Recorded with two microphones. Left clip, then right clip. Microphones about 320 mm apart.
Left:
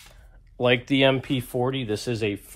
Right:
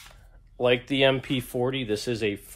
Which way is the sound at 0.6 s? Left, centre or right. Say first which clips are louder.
Left 1 dB; left.